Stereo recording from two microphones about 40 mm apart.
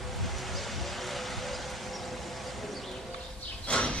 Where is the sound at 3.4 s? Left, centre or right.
Left.